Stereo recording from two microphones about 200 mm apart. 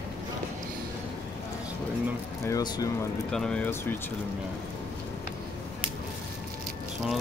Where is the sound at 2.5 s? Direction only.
20° left (ahead or behind).